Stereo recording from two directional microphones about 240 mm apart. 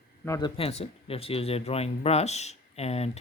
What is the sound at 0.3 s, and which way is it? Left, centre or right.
Speech, centre.